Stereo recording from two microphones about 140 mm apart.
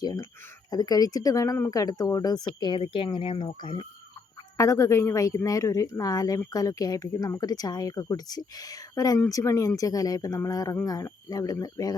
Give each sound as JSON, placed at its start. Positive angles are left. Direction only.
{"t": 0.0, "sound": "speech", "side_deg": 25}
{"t": 4.5, "sound": "speech", "side_deg": 20}